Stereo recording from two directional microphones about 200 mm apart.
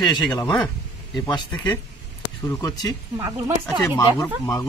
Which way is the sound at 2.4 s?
20° left (ahead or behind).